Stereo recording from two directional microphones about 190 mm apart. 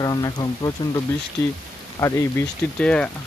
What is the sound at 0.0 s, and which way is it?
Speech, 20° left (ahead or behind).